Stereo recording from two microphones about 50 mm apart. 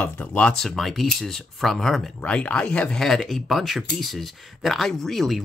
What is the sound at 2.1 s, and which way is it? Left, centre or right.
Speech, left.